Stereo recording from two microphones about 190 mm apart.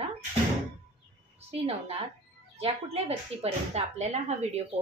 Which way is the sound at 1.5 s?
30° right (ahead or behind).